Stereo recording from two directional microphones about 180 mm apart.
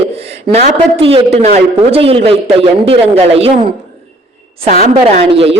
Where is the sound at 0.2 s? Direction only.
35° right (ahead or behind).